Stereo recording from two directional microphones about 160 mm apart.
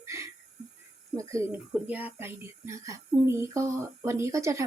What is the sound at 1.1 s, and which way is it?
Speech, 20° right (ahead or behind).